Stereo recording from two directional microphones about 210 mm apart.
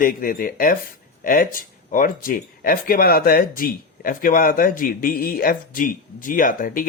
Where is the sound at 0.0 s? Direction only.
40° left (ahead or behind).